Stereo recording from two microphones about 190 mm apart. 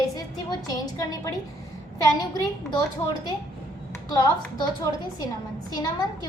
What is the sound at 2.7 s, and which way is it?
A woman's voice, 20° left (ahead or behind).